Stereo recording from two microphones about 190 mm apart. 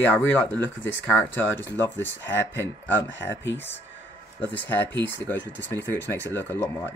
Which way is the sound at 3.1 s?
70° left (ahead or behind).